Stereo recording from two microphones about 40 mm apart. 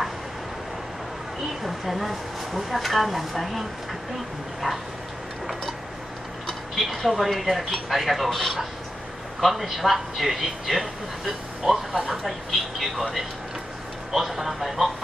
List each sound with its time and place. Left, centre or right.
1.6 s a man's voice: centre
4.6 s a sound: centre
6.4 s a man's voice: centre